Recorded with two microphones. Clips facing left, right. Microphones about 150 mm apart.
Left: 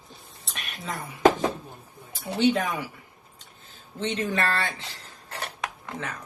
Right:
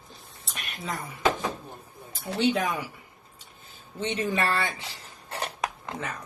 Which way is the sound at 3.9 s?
10° right (ahead or behind).